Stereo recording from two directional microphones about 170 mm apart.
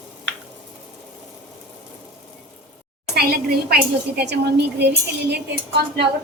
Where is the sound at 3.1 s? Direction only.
65° right (ahead or behind).